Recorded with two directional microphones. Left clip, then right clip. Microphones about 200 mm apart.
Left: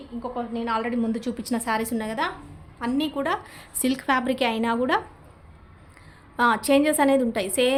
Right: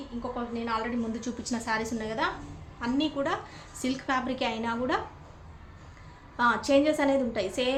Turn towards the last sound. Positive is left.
turn(degrees=60)  # may be behind; listen again after turning